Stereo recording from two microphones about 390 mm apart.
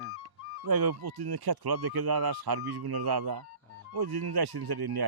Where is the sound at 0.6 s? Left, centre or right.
Right.